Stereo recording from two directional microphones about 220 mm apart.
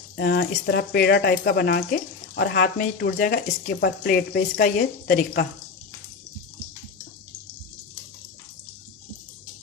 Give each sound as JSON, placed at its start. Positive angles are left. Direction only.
{"t": 0.2, "sound": "speech", "side_deg": 50}